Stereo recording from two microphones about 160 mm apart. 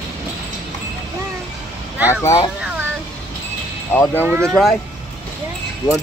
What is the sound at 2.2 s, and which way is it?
Speech, 25° left (ahead or behind).